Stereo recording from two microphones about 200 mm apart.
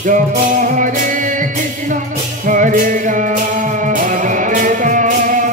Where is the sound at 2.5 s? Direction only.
40° right (ahead or behind).